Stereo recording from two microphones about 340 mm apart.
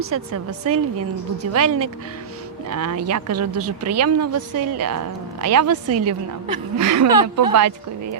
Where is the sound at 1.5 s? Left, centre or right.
Right.